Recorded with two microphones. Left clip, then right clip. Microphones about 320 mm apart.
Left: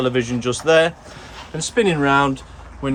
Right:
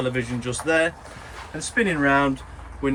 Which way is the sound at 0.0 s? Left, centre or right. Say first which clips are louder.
Left 6 dB; centre.